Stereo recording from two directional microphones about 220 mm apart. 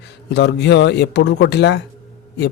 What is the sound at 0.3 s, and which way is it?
Speech, 50° left (ahead or behind).